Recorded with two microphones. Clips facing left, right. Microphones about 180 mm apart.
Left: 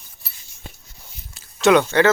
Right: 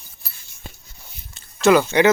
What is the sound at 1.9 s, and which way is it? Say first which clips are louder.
Speech: right 1 dB; 15° right (ahead or behind).